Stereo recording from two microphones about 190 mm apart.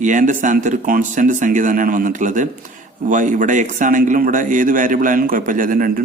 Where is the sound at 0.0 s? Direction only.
45° right (ahead or behind).